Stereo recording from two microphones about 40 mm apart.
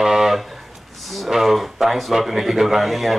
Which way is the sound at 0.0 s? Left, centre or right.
Centre.